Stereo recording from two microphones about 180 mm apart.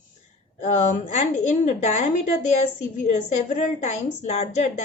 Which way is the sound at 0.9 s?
40° left (ahead or behind).